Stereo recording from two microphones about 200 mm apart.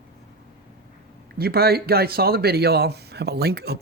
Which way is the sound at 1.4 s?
50° right (ahead or behind).